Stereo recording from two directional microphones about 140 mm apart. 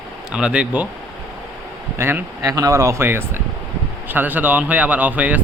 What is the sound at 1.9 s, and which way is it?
Speech, 20° right (ahead or behind).